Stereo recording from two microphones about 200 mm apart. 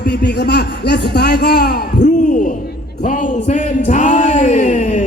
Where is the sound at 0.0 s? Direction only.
55° left (ahead or behind).